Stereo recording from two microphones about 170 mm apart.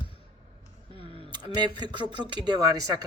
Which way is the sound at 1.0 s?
30° right (ahead or behind).